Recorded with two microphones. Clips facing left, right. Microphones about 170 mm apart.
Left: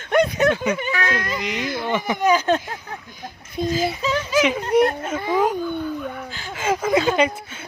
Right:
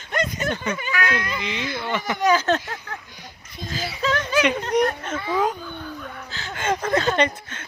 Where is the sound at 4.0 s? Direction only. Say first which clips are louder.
Right 3 dB; 10° left (ahead or behind).